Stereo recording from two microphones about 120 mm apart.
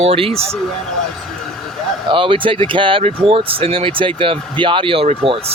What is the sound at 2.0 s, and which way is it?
Speech, 45° right (ahead or behind).